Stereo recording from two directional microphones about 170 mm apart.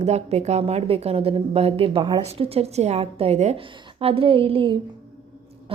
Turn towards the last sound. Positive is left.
turn(degrees=-30)  # may be behind; listen again after turning